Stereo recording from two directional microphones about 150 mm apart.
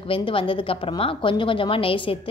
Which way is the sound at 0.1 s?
35° left (ahead or behind).